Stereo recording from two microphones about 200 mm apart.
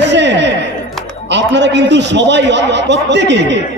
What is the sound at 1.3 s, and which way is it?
A man's voice, 60° right (ahead or behind).